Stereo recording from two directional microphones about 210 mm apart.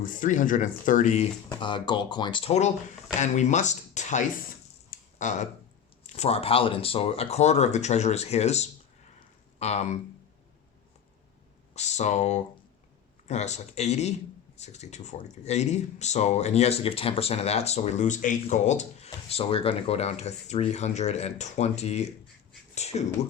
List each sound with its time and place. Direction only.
0.0 s speech: 40° left (ahead or behind)
1.5 s speech: 20° left (ahead or behind)
4.9 s a sound: 35° left (ahead or behind)
6.0 s speech: 30° left (ahead or behind)
11.7 s speech: 35° left (ahead or behind)